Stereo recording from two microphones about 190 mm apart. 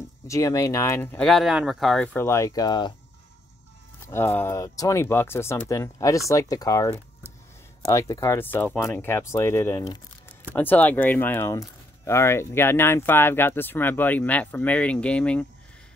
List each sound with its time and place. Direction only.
0.3 s speech: 15° left (ahead or behind); by 2.0 s centre (ahead or behind)
2.1 s speech: 15° left (ahead or behind)
4.1 s speech: 10° left (ahead or behind)